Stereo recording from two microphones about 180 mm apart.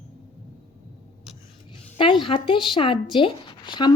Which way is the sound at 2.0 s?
30° left (ahead or behind).